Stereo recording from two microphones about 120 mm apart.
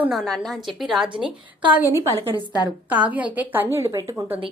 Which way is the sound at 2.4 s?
35° left (ahead or behind).